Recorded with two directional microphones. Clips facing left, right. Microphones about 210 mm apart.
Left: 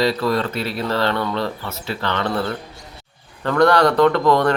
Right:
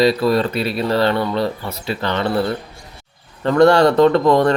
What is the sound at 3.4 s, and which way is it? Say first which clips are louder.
Speech: right 3 dB; 25° right (ahead or behind).